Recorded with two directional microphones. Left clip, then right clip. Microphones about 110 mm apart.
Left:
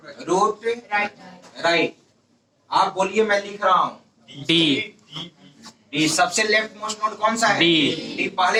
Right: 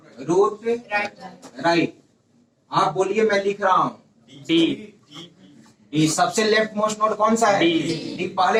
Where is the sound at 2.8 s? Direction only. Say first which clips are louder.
Right 2 dB; 40° right (ahead or behind).